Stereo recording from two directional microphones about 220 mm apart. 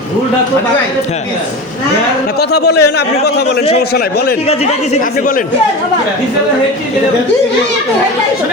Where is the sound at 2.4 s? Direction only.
50° left (ahead or behind).